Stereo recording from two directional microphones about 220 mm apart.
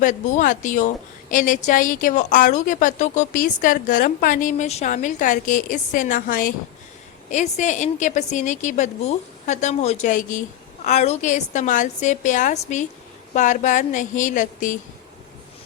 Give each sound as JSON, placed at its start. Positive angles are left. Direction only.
{"t": 0.0, "sound": "a woman's voice", "side_deg": 35}